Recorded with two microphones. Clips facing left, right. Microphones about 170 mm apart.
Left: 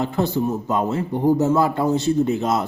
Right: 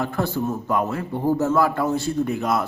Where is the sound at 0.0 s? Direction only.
20° left (ahead or behind).